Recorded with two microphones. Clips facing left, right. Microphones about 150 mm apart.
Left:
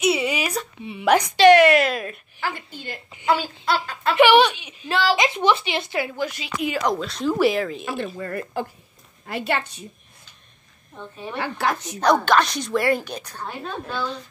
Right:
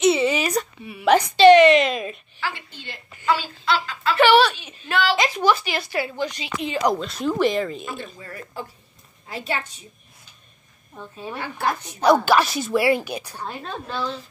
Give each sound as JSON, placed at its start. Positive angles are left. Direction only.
{"t": 0.0, "sound": "a sound", "side_deg": 10}
{"t": 1.0, "sound": "speech", "side_deg": 10}
{"t": 2.4, "sound": "a woman's voice", "side_deg": 45}
{"t": 4.1, "sound": "speech", "side_deg": 15}
{"t": 4.8, "sound": "a woman's voice", "side_deg": 30}
{"t": 7.8, "sound": "speech", "side_deg": 65}
{"t": 11.3, "sound": "a woman's voice", "side_deg": 75}
{"t": 12.0, "sound": "a woman's voice", "side_deg": -5}